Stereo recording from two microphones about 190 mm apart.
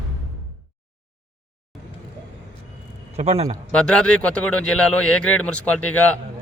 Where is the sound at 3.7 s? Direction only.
5° left (ahead or behind).